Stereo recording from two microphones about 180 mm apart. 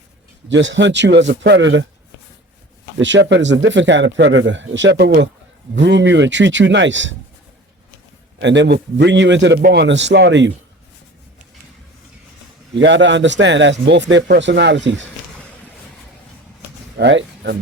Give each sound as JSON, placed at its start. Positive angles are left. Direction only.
{"t": 0.4, "sound": "a man's voice", "side_deg": -90}
{"t": 3.0, "sound": "speech", "side_deg": -85}
{"t": 5.7, "sound": "a man's voice", "side_deg": -80}
{"t": 8.4, "sound": "a man's voice", "side_deg": -80}
{"t": 9.6, "sound": "a man's voice", "side_deg": -50}
{"t": 9.8, "sound": "a man's voice", "side_deg": -80}
{"t": 12.7, "sound": "a man's voice", "side_deg": -80}
{"t": 17.0, "sound": "speech", "side_deg": -70}